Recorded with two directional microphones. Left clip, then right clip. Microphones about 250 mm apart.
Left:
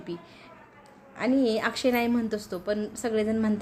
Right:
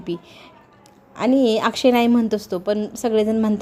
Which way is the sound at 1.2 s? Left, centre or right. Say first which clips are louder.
Right 8 dB; right.